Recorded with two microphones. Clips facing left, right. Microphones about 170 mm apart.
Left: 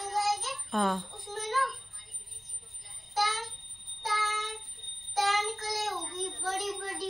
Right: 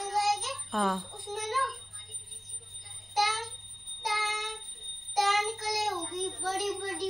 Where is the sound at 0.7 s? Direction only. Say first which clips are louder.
Left 1 dB; 5° right (ahead or behind).